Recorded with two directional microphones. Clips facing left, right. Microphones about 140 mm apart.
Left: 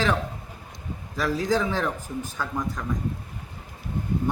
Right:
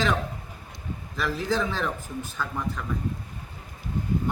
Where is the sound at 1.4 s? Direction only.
10° left (ahead or behind).